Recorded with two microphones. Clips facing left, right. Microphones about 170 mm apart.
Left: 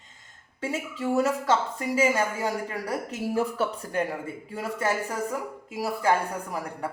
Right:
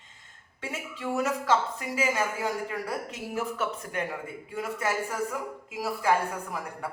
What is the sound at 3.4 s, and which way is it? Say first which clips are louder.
Speech: left 3 dB; 35° left (ahead or behind).